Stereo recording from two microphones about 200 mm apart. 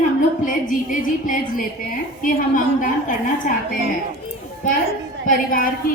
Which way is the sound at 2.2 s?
40° left (ahead or behind).